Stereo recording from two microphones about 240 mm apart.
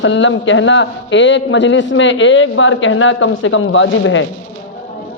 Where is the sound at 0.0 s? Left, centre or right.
Left.